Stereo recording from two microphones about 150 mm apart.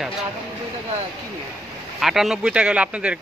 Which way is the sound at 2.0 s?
Centre (ahead or behind).